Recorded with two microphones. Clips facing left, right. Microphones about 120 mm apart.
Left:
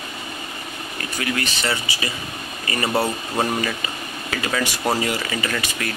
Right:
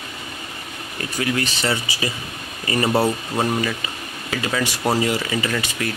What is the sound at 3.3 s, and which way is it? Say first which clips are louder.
Speech: right 1 dB; 5° left (ahead or behind).